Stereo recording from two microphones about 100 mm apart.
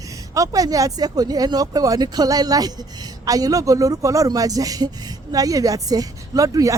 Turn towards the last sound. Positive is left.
turn(degrees=-35)  # may be behind; listen again after turning